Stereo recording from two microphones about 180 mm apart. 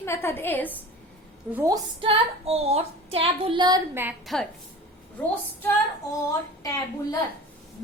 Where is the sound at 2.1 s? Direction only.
35° right (ahead or behind).